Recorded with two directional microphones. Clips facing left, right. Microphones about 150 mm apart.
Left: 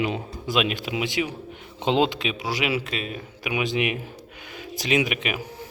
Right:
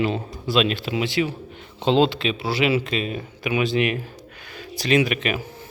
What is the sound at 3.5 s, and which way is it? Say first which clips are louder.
A man's voice: right 3 dB; 15° left (ahead or behind).